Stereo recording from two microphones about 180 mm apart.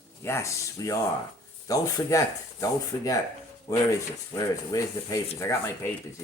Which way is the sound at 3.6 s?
20° left (ahead or behind).